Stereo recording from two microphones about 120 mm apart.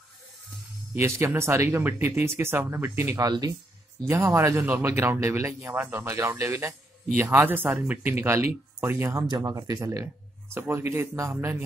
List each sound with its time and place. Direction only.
0.9 s speech: 25° right (ahead or behind)
3.3 s speech: 35° right (ahead or behind)